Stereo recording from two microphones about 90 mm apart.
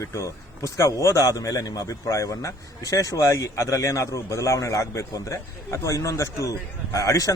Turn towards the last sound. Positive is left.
turn(degrees=40)  # may be behind; listen again after turning